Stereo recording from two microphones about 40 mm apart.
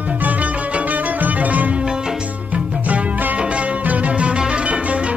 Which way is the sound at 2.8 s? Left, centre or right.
Right.